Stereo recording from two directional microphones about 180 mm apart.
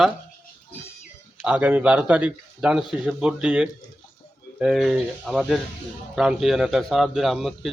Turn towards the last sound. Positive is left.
turn(degrees=0)  # may be behind; listen again after turning